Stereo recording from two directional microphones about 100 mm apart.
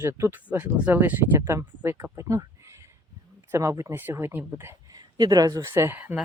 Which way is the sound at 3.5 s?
25° right (ahead or behind).